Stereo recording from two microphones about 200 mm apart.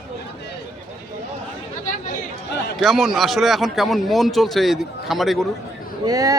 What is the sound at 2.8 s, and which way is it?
A man's voice, centre (ahead or behind).